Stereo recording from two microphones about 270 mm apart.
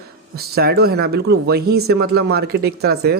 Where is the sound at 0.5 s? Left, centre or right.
Right.